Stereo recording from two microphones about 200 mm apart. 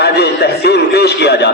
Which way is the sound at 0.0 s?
55° left (ahead or behind).